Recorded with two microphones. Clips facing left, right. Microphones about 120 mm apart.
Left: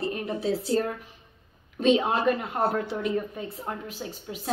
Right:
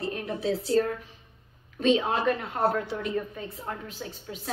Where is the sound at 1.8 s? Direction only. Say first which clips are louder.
Left 2 dB; 15° left (ahead or behind).